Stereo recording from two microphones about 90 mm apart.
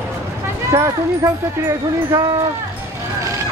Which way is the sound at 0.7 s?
35° right (ahead or behind).